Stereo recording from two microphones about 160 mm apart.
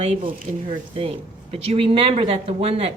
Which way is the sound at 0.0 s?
35° right (ahead or behind).